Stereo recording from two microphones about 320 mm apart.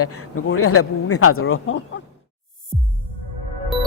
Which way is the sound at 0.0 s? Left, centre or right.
Left.